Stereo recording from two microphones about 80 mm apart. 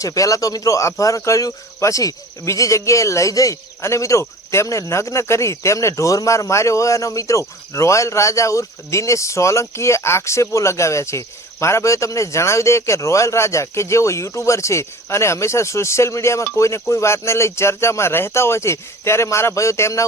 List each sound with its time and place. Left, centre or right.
0.0 s speech: left